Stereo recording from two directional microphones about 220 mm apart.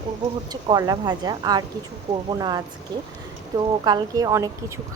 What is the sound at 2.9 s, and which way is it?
A woman's voice, 20° right (ahead or behind).